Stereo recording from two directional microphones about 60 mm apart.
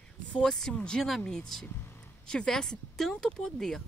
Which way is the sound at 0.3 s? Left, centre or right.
Centre.